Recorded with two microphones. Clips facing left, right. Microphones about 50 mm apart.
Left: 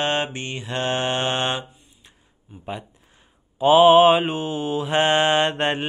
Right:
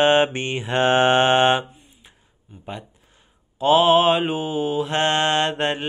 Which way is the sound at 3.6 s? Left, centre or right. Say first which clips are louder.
Left 3 dB; centre.